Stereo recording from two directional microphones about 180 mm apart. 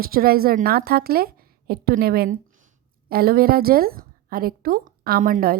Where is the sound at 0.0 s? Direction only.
55° right (ahead or behind).